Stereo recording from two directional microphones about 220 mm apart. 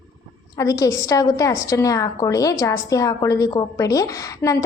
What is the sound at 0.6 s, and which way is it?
A woman's voice, 15° left (ahead or behind).